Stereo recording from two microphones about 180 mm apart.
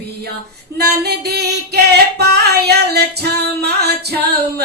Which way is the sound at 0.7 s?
65° right (ahead or behind).